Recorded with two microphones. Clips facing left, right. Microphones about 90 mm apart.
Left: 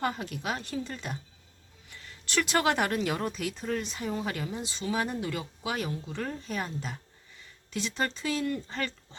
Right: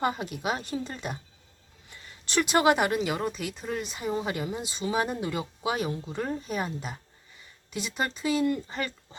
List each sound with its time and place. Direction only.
0.0 s speech: 15° right (ahead or behind)
2.2 s speech: 20° right (ahead or behind)